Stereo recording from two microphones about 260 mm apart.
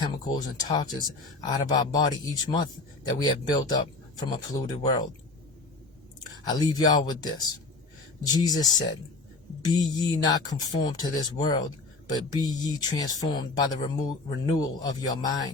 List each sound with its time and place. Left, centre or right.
0.0 s speech: centre
4.8 s speech: centre
6.5 s speech: centre